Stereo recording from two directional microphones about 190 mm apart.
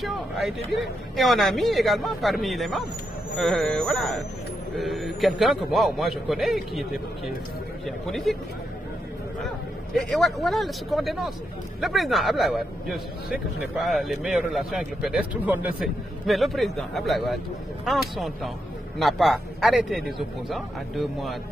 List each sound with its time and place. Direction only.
0.0 s speech: centre (ahead or behind)
9.9 s speech: centre (ahead or behind)